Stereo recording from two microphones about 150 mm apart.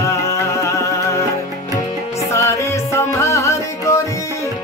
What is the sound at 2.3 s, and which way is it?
Music, 20° left (ahead or behind).